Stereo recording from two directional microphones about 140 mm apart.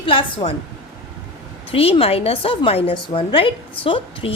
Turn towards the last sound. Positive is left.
turn(degrees=40)  # may be behind; listen again after turning